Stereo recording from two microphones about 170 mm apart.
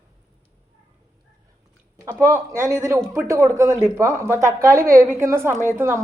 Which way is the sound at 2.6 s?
15° right (ahead or behind).